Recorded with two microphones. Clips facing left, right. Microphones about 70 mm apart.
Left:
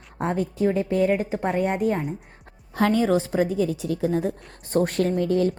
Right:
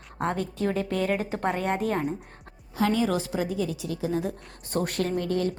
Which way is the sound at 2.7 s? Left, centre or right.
Left.